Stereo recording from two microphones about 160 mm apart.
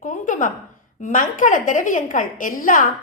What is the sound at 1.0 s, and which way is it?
A woman's voice, 50° left (ahead or behind).